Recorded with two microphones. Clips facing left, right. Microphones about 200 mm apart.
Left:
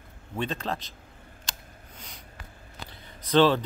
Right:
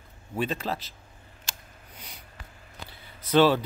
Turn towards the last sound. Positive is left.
turn(degrees=-10)  # may be behind; listen again after turning